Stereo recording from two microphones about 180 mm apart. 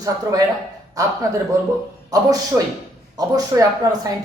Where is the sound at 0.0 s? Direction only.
20° right (ahead or behind).